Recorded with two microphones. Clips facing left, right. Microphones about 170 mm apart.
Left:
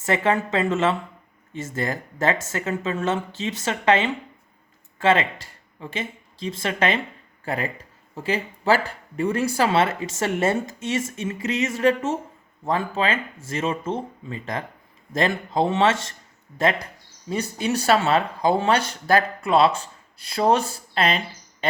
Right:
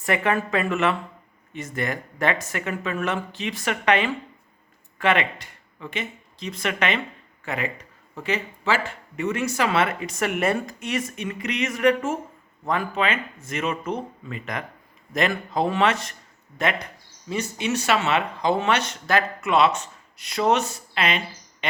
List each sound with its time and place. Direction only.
0.0 s speech: 25° left (ahead or behind)